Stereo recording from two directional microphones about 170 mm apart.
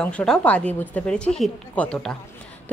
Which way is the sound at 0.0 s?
5° left (ahead or behind).